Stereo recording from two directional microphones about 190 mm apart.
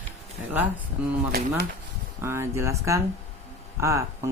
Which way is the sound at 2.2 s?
15° right (ahead or behind).